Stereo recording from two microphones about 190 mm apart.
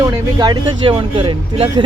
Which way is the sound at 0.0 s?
20° right (ahead or behind).